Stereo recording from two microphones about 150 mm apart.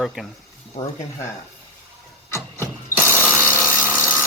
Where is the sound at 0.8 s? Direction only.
55° left (ahead or behind).